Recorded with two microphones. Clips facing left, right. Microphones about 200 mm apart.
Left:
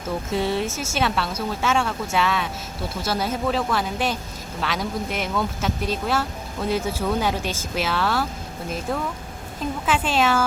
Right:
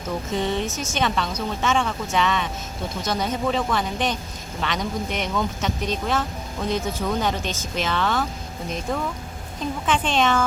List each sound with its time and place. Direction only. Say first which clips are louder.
0.3 s a woman's voice: left 1 dB; 5° left (ahead or behind)